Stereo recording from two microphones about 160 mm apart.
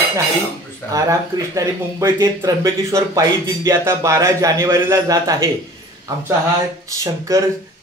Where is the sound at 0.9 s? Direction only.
20° right (ahead or behind).